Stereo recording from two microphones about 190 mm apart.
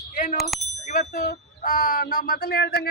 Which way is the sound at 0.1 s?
40° left (ahead or behind).